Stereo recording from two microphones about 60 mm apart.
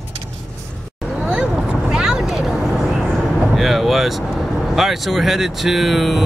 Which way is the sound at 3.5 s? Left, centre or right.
Centre.